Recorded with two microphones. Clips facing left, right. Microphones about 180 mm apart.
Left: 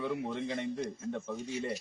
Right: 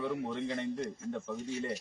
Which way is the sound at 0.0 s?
5° left (ahead or behind).